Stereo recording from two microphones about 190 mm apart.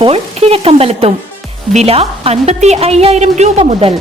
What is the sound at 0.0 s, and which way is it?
Speech, 30° right (ahead or behind).